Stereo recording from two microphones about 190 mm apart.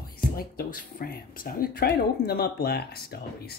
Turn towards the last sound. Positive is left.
turn(degrees=55)  # may be behind; listen again after turning